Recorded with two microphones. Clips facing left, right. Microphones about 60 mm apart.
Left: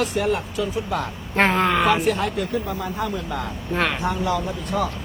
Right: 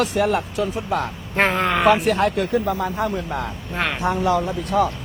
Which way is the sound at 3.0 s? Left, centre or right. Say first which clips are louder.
Right 3 dB; right.